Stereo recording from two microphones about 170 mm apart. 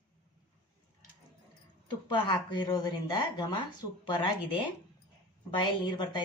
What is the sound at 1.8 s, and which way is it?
A woman's voice, 25° left (ahead or behind).